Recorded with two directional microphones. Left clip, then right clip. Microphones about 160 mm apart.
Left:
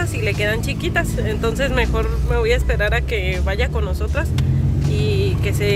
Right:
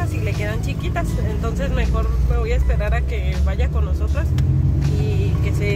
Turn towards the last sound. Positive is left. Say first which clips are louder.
# left 4 dB
turn(degrees=20)  # may be behind; listen again after turning